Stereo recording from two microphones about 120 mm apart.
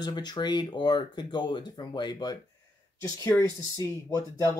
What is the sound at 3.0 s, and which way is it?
Speech, 25° left (ahead or behind).